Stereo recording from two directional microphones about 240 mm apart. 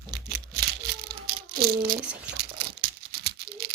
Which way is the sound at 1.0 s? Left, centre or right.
Right.